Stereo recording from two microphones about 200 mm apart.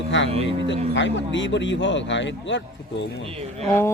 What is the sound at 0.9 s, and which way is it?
A man's voice, 65° left (ahead or behind).